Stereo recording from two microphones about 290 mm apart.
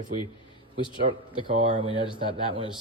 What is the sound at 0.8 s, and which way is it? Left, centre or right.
Speech, centre.